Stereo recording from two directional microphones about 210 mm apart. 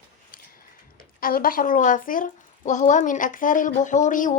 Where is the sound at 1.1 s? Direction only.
45° left (ahead or behind).